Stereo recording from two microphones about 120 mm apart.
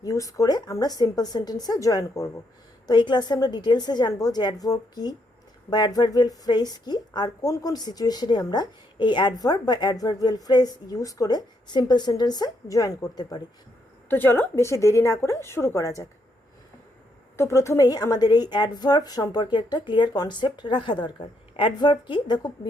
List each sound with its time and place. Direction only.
0.0 s a woman's voice: 30° left (ahead or behind)
14.1 s a woman's voice: 15° left (ahead or behind)
17.3 s a woman's voice: 25° left (ahead or behind); by 22.7 s 40° left (ahead or behind)